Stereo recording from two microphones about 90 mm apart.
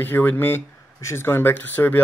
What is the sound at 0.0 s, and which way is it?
Speech, 20° left (ahead or behind).